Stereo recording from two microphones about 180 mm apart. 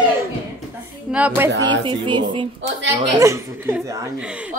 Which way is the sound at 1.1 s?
10° right (ahead or behind).